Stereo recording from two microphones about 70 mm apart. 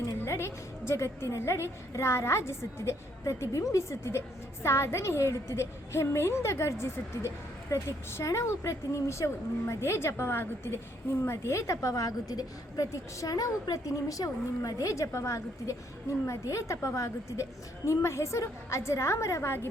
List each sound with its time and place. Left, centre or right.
0.0 s a woman's voice: left
13.3 s a woman's voice: left